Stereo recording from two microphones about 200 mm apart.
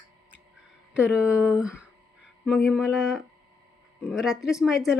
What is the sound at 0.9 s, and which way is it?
Speech, 5° right (ahead or behind).